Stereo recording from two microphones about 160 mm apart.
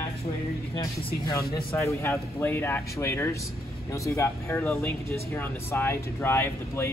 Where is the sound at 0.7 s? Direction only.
20° left (ahead or behind).